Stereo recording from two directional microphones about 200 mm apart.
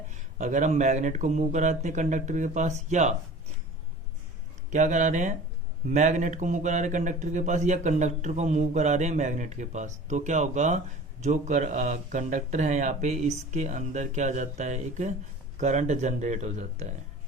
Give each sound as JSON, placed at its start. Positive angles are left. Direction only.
{"t": 0.1, "sound": "speech", "side_deg": -35}
{"t": 4.7, "sound": "speech", "side_deg": -40}